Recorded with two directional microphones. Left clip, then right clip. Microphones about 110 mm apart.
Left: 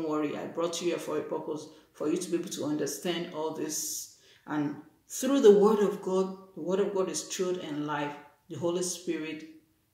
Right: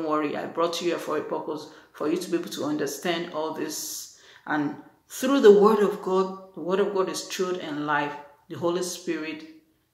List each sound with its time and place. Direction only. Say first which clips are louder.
0.0 s speech: right 5 dB; 20° left (ahead or behind)